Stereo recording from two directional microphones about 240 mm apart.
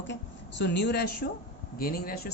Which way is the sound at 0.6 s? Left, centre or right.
Left.